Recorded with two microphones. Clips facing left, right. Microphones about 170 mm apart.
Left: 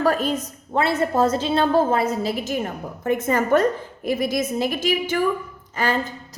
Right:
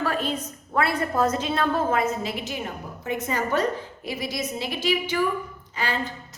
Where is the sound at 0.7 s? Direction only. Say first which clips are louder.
Left 4 dB; 25° left (ahead or behind).